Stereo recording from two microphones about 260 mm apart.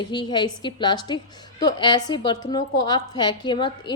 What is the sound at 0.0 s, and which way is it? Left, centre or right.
A woman's voice, centre.